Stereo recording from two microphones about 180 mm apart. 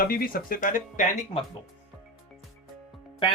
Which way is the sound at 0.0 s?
55° left (ahead or behind).